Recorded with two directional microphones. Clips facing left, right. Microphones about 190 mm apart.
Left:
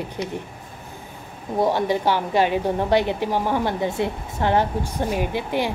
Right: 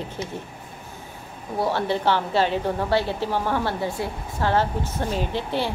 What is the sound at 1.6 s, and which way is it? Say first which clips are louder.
A woman's voice: left 3 dB; 15° left (ahead or behind).